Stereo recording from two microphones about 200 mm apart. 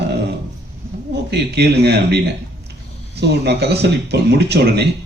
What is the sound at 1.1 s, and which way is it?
Speech, 55° right (ahead or behind).